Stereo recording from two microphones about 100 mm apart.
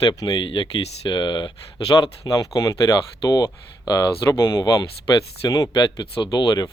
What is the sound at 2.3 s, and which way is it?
Speech, 35° left (ahead or behind).